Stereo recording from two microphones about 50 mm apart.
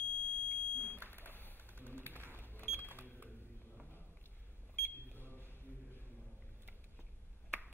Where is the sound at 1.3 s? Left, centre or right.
Left.